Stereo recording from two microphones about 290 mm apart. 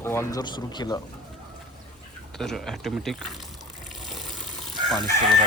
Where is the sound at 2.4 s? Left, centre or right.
Centre.